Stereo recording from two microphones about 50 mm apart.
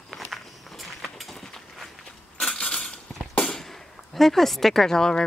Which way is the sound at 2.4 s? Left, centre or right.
Centre.